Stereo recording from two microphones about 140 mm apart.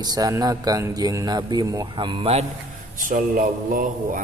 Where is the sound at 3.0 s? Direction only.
75° right (ahead or behind).